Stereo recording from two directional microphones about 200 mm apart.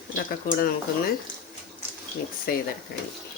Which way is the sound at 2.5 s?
50° left (ahead or behind).